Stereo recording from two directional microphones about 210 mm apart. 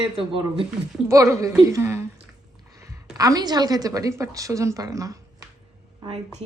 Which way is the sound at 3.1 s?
15° right (ahead or behind).